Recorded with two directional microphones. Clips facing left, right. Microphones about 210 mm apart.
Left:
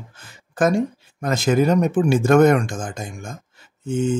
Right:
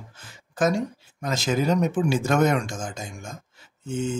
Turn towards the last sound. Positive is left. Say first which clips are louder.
# left 6 dB
turn(degrees=55)  # may be behind; listen again after turning